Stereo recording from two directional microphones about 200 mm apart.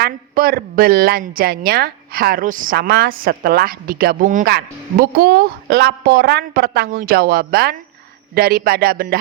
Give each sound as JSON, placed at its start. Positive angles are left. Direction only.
{"t": 0.0, "sound": "speech", "side_deg": -45}